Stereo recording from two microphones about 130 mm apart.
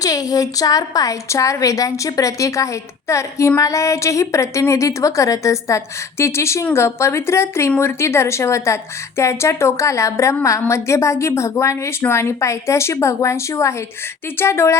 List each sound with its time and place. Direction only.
0.0 s a woman's voice: 30° left (ahead or behind)